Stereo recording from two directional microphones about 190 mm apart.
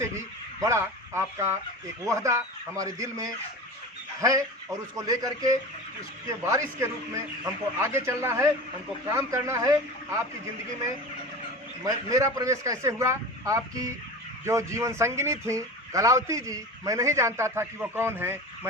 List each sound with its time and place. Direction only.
0.6 s a man's voice: 15° right (ahead or behind)
12.0 s speech: 20° right (ahead or behind)